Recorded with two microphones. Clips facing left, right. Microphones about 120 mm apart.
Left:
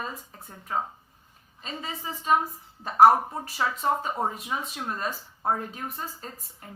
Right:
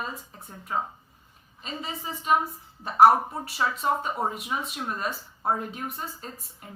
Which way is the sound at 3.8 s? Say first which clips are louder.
Even; 25° left (ahead or behind).